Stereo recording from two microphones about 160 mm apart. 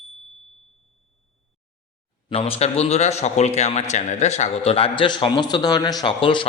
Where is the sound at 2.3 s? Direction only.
40° left (ahead or behind).